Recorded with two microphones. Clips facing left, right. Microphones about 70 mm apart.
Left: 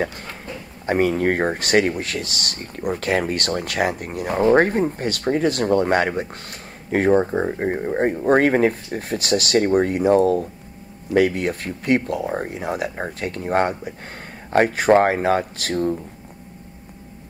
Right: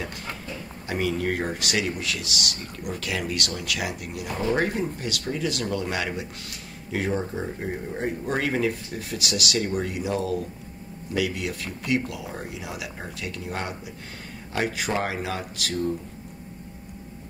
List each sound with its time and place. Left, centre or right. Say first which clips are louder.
0.0 s speech: left 7 dB; left